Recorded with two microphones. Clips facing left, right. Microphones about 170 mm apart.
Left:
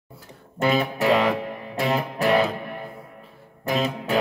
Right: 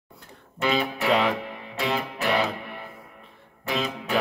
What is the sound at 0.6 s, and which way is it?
Music, 45° left (ahead or behind).